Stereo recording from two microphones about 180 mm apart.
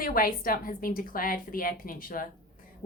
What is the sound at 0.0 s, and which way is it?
A woman's voice, 55° left (ahead or behind).